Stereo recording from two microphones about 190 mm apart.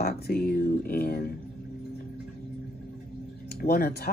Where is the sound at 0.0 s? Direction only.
55° left (ahead or behind).